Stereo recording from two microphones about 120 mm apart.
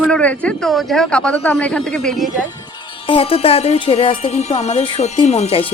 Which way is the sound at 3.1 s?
55° left (ahead or behind).